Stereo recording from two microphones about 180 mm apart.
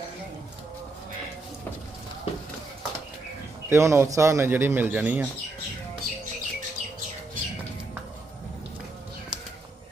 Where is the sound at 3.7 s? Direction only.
15° right (ahead or behind).